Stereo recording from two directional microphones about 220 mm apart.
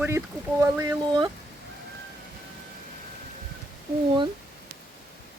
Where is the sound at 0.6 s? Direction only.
15° right (ahead or behind).